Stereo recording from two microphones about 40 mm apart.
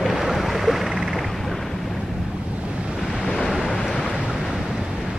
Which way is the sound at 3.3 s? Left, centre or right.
Centre.